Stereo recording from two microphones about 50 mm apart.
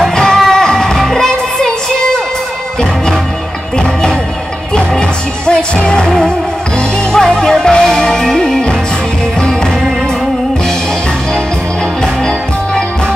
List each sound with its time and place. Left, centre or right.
0.0 s music: centre
5.5 s music: centre